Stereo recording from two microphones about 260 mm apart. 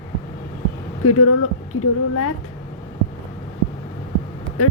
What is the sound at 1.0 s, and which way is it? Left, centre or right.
Speech, left.